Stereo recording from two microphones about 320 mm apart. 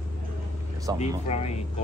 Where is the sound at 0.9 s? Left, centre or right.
Left.